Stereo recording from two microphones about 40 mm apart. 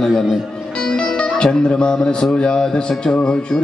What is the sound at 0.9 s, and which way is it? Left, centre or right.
Music, left.